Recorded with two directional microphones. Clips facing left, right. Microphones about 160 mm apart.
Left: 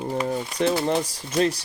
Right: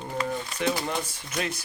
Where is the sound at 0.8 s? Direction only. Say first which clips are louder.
Left 7 dB; 35° left (ahead or behind).